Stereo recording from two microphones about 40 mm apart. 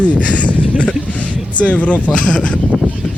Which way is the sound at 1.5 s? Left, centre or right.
Left.